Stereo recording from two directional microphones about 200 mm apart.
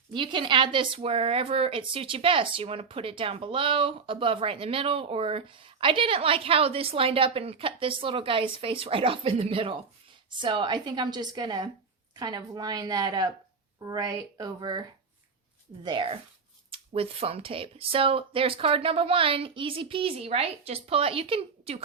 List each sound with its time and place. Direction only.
0.1 s a woman's voice: 25° right (ahead or behind)